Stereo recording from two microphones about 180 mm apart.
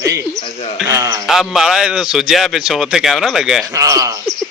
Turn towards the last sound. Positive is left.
turn(degrees=-20)  # may be behind; listen again after turning